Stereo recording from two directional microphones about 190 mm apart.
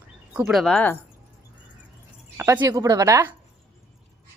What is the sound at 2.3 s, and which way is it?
Speech, 15° right (ahead or behind).